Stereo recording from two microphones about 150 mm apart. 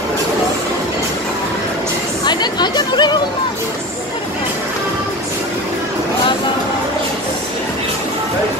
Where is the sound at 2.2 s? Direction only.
30° left (ahead or behind).